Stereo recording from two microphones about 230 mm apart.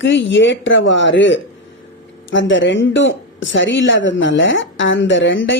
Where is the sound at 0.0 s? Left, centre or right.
Left.